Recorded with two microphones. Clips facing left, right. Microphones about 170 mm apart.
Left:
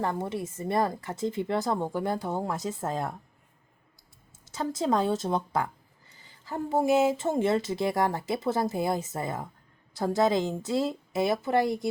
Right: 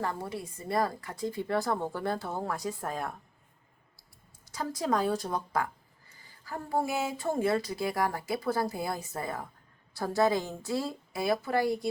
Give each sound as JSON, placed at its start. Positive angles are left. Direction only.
{"t": 0.0, "sound": "speech", "side_deg": 25}
{"t": 4.4, "sound": "speech", "side_deg": 25}